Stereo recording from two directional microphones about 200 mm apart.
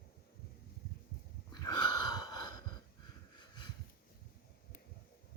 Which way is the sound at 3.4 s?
20° left (ahead or behind).